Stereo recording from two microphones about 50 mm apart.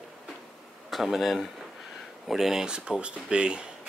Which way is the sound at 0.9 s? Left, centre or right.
Centre.